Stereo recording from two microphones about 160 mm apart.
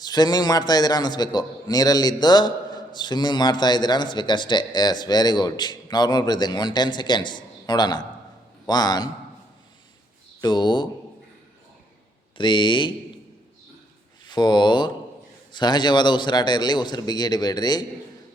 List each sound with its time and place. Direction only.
0.0 s a man's voice: 25° left (ahead or behind)
10.4 s a man's voice: 30° left (ahead or behind)
12.4 s a man's voice: 30° left (ahead or behind)
14.3 s a man's voice: 25° left (ahead or behind)